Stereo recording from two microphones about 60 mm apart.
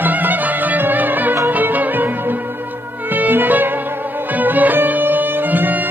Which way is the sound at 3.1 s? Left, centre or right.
Right.